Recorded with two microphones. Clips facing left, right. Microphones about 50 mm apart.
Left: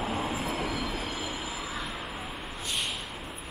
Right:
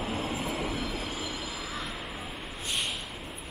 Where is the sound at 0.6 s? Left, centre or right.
Left.